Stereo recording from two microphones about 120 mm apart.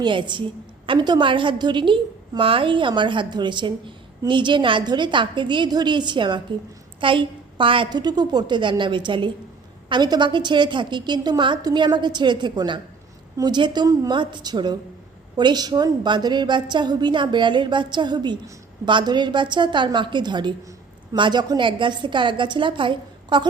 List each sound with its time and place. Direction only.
0.0 s a woman's voice: 40° right (ahead or behind)